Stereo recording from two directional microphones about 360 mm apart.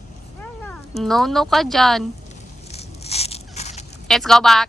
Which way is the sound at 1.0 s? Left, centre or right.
Centre.